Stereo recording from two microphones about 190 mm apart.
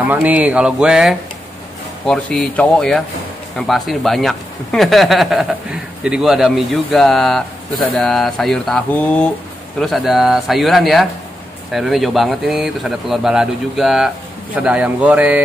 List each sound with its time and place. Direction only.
0.0 s speech: 10° right (ahead or behind)